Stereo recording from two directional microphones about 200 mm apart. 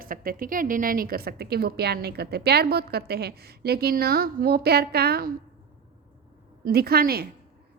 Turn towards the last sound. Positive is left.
turn(degrees=-50)  # may be behind; listen again after turning